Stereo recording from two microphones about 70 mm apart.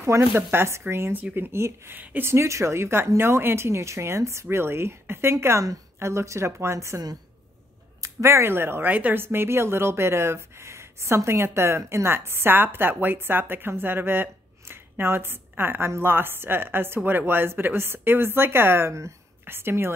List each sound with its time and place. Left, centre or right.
0.1 s speech: right
2.3 s speech: right
8.0 s speech: right